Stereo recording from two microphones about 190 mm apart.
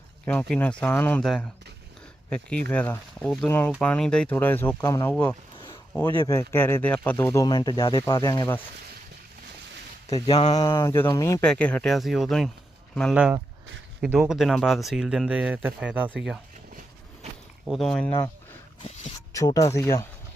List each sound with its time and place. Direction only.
0.3 s speech: 5° left (ahead or behind)
5.1 s speech: 5° left (ahead or behind)
7.4 s speech: 20° left (ahead or behind)
10.2 s speech: 30° left (ahead or behind)
10.6 s speech: 15° left (ahead or behind)
11.4 s speech: 5° left (ahead or behind)
13.1 s speech: 5° right (ahead or behind)
17.7 s speech: centre (ahead or behind)
18.8 s speech: 35° left (ahead or behind)
19.3 s speech: 15° left (ahead or behind)